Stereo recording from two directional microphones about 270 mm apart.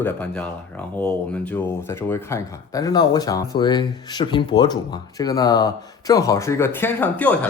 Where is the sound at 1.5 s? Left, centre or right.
Centre.